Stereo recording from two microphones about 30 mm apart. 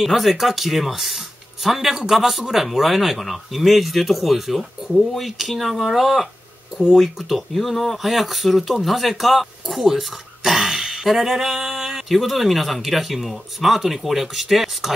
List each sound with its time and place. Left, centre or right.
0.0 s speech: centre
7.3 s speech: centre
9.9 s throat clearing: centre
10.6 s a sound: right
11.1 s speech: centre